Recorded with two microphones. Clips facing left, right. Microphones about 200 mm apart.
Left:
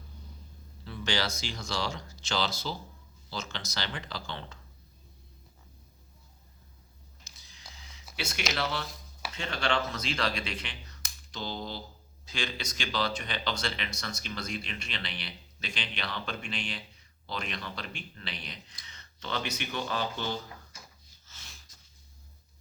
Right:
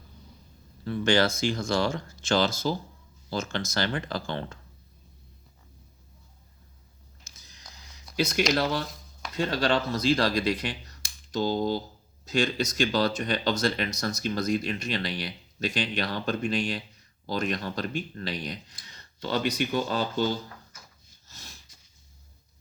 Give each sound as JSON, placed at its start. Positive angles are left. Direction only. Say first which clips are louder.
{"t": 0.9, "sound": "speech", "louder": "right 9 dB", "side_deg": -50}
{"t": 7.3, "sound": "a sound", "louder": "right 3 dB", "side_deg": -45}
{"t": 8.1, "sound": "speech", "louder": "right 10 dB", "side_deg": -40}